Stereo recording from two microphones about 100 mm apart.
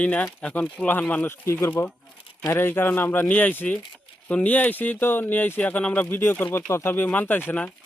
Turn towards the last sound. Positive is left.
turn(degrees=15)  # may be behind; listen again after turning